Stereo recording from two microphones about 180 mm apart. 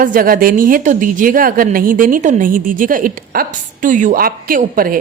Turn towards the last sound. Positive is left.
turn(degrees=-50)  # may be behind; listen again after turning